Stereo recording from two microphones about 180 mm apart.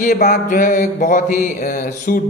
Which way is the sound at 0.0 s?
50° left (ahead or behind).